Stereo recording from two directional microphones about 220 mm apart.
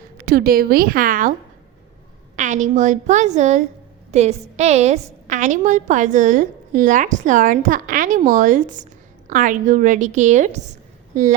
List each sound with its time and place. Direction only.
0.3 s a woman's voice: 45° right (ahead or behind)
2.3 s a woman's voice: 35° right (ahead or behind)